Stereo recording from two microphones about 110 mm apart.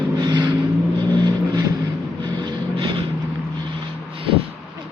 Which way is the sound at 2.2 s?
45° right (ahead or behind).